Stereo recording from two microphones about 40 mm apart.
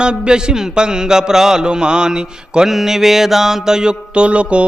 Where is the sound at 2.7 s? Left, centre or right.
Centre; by 4.7 s right.